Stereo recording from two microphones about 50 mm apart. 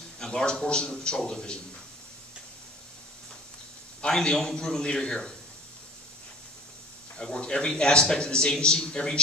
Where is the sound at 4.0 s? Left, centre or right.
Centre.